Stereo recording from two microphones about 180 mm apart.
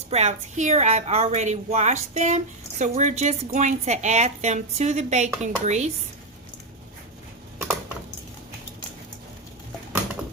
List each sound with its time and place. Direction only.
0.1 s a woman's voice: 40° right (ahead or behind)